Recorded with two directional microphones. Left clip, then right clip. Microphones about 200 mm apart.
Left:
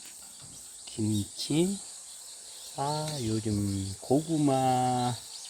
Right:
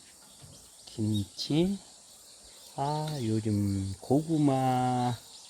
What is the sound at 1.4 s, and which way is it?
Speech, centre (ahead or behind).